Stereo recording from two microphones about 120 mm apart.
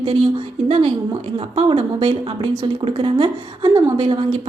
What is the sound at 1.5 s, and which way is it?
A woman's voice, 50° right (ahead or behind).